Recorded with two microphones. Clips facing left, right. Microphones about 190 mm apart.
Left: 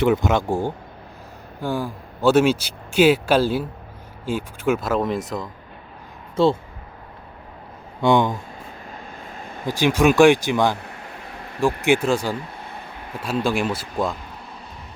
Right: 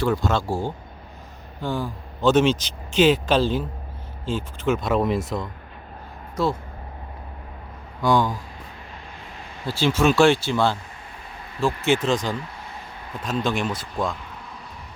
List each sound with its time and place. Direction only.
0.0 s speech: 20° left (ahead or behind); by 5.5 s centre (ahead or behind)
6.3 s speech: 30° left (ahead or behind)
8.0 s speech: 25° left (ahead or behind)
9.6 s speech: 15° left (ahead or behind)